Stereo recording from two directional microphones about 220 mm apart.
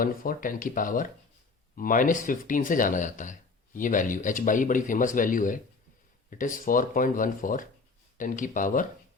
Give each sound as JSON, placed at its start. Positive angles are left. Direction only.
{"t": 0.0, "sound": "speech", "side_deg": 40}